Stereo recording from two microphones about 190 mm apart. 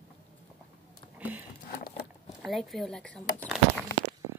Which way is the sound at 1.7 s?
50° left (ahead or behind).